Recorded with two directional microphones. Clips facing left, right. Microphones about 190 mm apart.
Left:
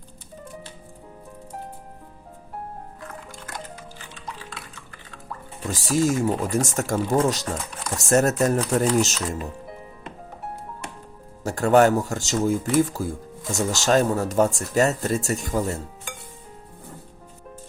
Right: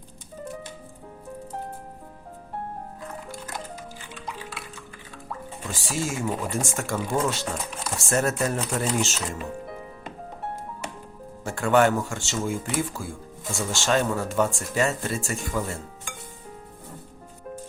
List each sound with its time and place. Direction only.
5.7 s speech: 40° left (ahead or behind)
11.4 s speech: 40° left (ahead or behind)